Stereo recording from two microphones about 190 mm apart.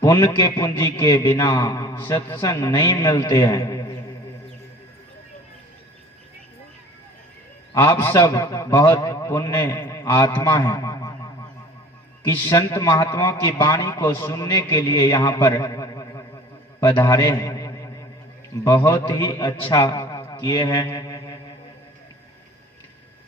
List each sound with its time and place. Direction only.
0.0 s a man's voice: 15° left (ahead or behind)
7.7 s a man's voice: 15° left (ahead or behind)